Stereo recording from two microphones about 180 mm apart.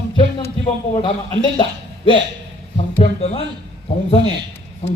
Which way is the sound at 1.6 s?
30° left (ahead or behind).